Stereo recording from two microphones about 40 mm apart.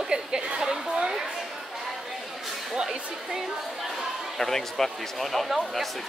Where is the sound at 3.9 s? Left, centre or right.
Centre.